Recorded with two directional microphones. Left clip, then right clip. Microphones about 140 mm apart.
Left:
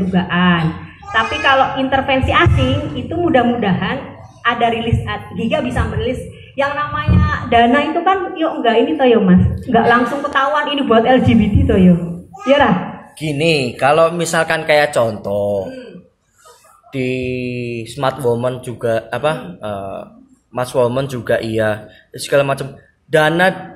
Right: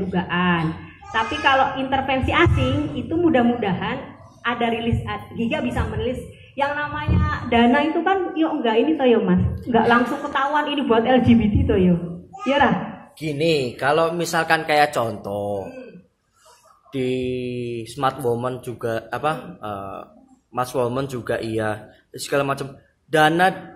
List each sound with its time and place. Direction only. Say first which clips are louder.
0.1 s speech: left 6 dB; 30° right (ahead or behind)
13.2 s speech: left 5 dB; centre (ahead or behind)
16.9 s speech: left 4 dB; 10° right (ahead or behind)